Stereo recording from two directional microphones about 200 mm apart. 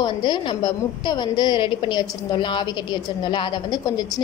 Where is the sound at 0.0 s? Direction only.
20° left (ahead or behind).